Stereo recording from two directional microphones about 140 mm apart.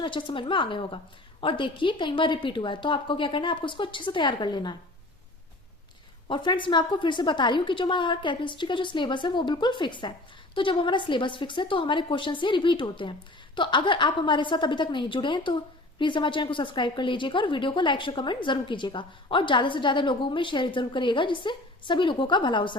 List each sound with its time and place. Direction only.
0.0 s a woman's voice: 35° left (ahead or behind)
6.2 s a woman's voice: 35° left (ahead or behind)